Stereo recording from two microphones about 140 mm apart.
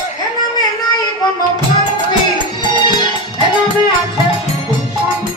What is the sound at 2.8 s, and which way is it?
Music, 35° left (ahead or behind).